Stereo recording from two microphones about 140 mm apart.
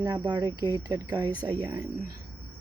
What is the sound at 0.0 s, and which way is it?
Speech, 25° right (ahead or behind).